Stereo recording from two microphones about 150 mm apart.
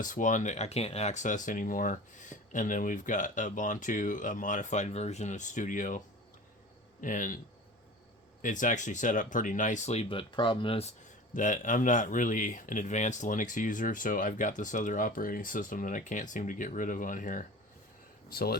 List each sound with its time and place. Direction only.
0.0 s speech: 60° left (ahead or behind)
7.0 s speech: 60° left (ahead or behind)
8.4 s speech: 60° left (ahead or behind); by 10.9 s 40° left (ahead or behind)
11.3 s speech: 60° left (ahead or behind)
18.3 s speech: 90° left